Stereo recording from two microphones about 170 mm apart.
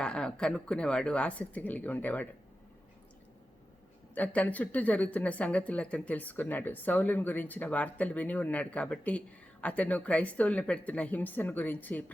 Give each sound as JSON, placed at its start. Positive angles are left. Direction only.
{"t": 0.0, "sound": "a woman's voice", "side_deg": 5}
{"t": 4.1, "sound": "a woman's voice", "side_deg": 10}